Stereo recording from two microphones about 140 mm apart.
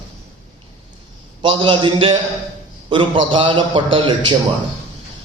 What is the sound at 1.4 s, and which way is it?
A man's voice, 35° right (ahead or behind).